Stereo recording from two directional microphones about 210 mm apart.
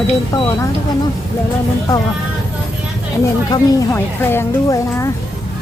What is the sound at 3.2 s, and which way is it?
Speech, 15° left (ahead or behind).